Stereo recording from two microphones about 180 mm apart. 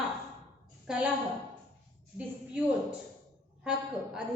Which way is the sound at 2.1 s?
10° right (ahead or behind).